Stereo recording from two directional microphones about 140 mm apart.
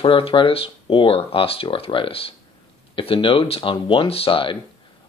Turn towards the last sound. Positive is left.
turn(degrees=40)  # may be behind; listen again after turning